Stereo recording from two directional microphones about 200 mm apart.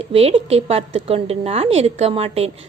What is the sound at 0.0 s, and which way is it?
A woman's voice, 30° right (ahead or behind).